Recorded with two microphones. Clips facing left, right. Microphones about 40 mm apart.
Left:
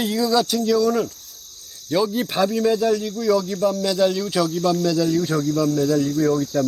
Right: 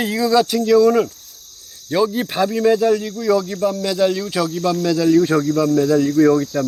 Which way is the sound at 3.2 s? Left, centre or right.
Centre.